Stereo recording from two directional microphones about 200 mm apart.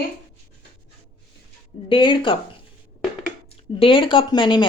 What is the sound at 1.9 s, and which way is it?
A woman's voice, 25° left (ahead or behind).